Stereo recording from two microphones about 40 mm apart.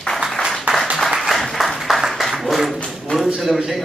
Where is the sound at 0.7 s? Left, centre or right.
Right.